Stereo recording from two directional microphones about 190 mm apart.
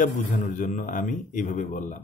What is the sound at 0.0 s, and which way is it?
Speech, 40° left (ahead or behind).